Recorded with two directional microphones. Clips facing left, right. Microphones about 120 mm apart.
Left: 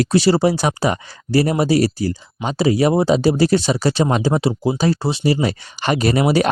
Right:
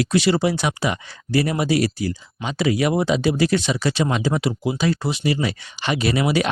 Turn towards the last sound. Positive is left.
turn(degrees=40)  # may be behind; listen again after turning